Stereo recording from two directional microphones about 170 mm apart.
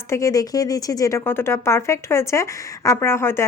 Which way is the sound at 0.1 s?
20° left (ahead or behind).